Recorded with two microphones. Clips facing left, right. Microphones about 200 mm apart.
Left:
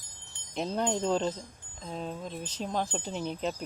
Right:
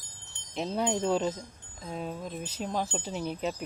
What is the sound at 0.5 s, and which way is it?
Speech, centre (ahead or behind).